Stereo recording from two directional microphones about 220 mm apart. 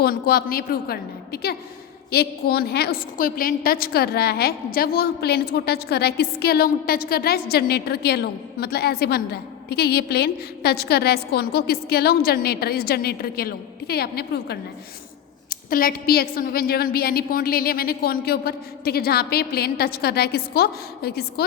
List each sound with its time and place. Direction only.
0.0 s a woman's voice: 45° left (ahead or behind)